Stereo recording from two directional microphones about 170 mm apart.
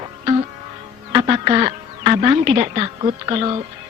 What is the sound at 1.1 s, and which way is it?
Speech, 30° right (ahead or behind).